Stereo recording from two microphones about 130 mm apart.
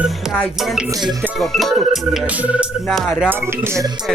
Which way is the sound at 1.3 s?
Centre (ahead or behind).